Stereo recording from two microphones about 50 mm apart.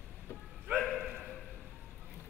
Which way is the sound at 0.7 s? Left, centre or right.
Right.